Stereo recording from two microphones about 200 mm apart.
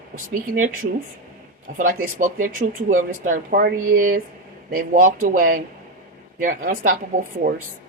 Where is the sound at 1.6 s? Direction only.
45° right (ahead or behind).